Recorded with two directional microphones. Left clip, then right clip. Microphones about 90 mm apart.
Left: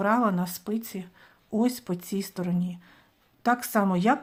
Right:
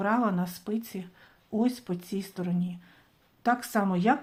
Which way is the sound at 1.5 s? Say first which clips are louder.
Left 2 dB; 50° left (ahead or behind).